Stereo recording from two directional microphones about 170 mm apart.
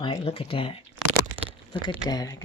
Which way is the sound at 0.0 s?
30° left (ahead or behind).